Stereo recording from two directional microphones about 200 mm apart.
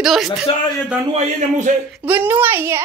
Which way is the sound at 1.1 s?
40° right (ahead or behind).